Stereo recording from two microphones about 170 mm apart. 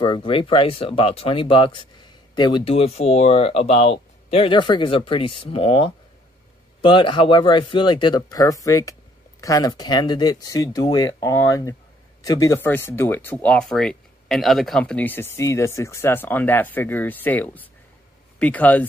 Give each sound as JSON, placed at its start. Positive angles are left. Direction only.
{"t": 0.0, "sound": "speech", "side_deg": 30}